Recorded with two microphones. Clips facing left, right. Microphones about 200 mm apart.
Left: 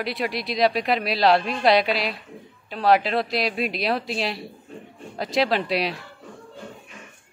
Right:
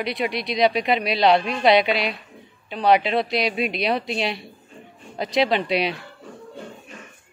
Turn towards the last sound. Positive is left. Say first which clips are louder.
# right 2 dB
turn(degrees=0)  # may be behind; listen again after turning